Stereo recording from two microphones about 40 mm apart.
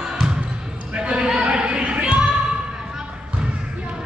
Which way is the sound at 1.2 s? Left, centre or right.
Right.